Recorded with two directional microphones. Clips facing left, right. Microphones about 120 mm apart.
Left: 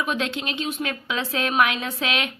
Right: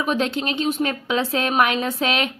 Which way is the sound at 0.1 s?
40° right (ahead or behind).